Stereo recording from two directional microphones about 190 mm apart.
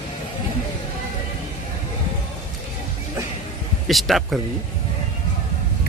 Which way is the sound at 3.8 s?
Centre (ahead or behind).